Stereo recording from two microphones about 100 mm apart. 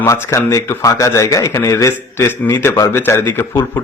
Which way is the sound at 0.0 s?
30° left (ahead or behind).